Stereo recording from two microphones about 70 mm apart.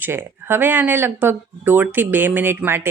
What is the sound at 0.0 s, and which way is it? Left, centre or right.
Speech, right.